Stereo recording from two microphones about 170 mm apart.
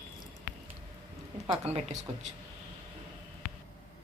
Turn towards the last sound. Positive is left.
turn(degrees=60)  # may be behind; listen again after turning